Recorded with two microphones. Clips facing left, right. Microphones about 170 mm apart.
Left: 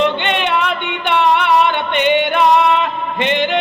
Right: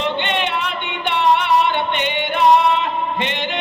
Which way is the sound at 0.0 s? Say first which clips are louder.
Left 4 dB; 65° left (ahead or behind).